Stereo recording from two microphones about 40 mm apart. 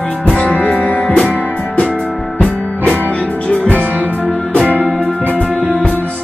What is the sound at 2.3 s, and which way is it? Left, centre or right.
Music, left.